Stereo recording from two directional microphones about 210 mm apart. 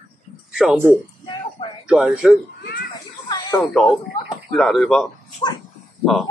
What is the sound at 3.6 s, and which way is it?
A child's voice, centre (ahead or behind).